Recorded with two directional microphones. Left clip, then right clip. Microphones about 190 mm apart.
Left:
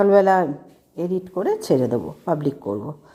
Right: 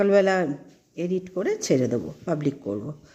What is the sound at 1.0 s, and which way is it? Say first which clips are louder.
Speech: left 3 dB; 5° right (ahead or behind).